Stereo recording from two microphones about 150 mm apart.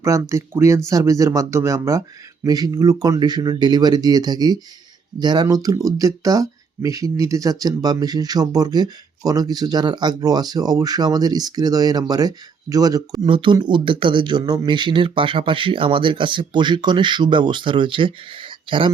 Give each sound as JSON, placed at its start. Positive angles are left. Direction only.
{"t": 0.0, "sound": "speech", "side_deg": -20}